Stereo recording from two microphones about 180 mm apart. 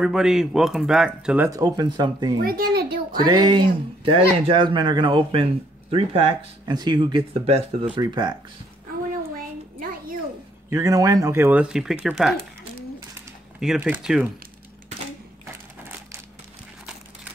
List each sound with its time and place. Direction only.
0.0 s speech: 5° right (ahead or behind)
1.5 s speech: 20° right (ahead or behind)
2.4 s a child's voice: 55° right (ahead or behind)
3.3 s speech: 25° right (ahead or behind)
10.7 s speech: 20° right (ahead or behind)
13.7 s speech: 10° right (ahead or behind)
15.4 s typewriter: 15° right (ahead or behind)